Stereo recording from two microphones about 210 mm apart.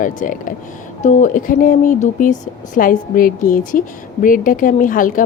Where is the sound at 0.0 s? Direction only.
40° left (ahead or behind).